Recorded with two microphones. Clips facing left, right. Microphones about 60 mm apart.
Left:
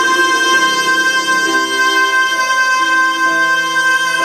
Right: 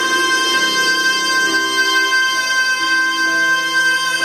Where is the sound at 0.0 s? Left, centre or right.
Centre.